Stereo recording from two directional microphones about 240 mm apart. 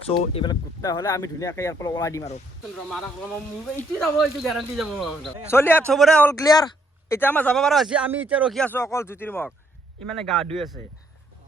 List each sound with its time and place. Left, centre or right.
0.1 s a man's voice: centre
3.8 s a man's voice: centre